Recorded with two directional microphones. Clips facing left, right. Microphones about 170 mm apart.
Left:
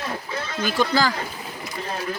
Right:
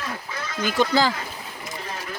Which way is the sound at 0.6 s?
20° right (ahead or behind).